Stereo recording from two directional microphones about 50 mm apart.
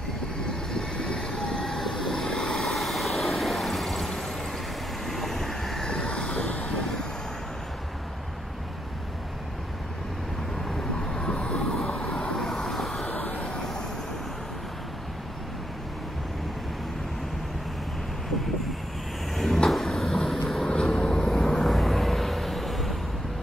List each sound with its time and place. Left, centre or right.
0.7 s vehicle: centre
5.9 s vehicle: centre
10.7 s vehicle: centre
13.0 s vehicle: left
13.5 s vehicle: centre
19.3 s vehicle: centre
21.6 s a sound: centre